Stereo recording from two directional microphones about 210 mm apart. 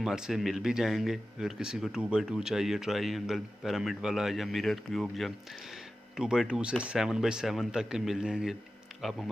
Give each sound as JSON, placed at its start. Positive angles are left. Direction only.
{"t": 0.0, "sound": "speech", "side_deg": 0}